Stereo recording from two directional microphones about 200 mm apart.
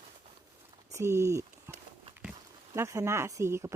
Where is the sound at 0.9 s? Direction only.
15° right (ahead or behind).